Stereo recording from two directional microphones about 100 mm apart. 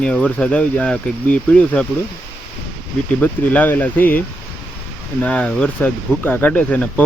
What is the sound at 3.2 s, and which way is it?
Speech, 20° left (ahead or behind).